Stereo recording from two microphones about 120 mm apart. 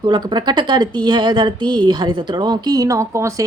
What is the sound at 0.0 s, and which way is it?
Speech, 40° right (ahead or behind).